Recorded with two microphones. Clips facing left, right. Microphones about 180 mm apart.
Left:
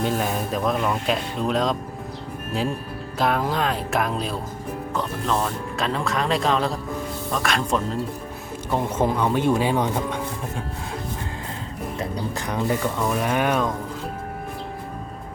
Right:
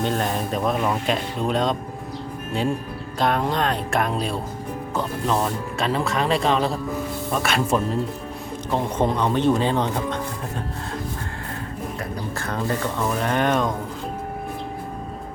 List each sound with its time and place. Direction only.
0.0 s speech: 5° left (ahead or behind)
3.2 s speech: 5° left (ahead or behind)
8.7 s speech: 5° left (ahead or behind)
11.9 s music: 15° left (ahead or behind)
13.0 s speech: 5° left (ahead or behind)